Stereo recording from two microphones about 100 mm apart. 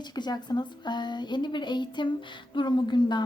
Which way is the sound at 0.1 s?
45° left (ahead or behind).